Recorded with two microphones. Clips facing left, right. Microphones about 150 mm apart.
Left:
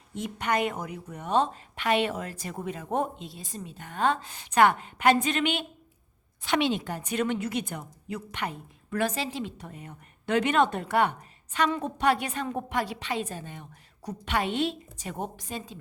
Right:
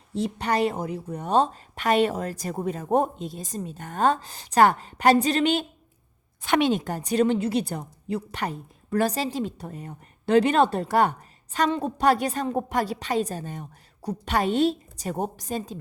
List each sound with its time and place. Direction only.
0.1 s a woman's voice: 30° right (ahead or behind)
6.4 s a woman's voice: 45° right (ahead or behind)